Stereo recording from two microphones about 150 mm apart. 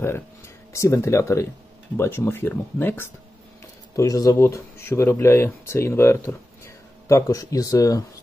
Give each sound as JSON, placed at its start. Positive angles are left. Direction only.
{"t": 0.7, "sound": "speech", "side_deg": 20}